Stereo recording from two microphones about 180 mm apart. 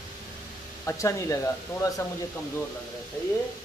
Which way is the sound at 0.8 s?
15° left (ahead or behind).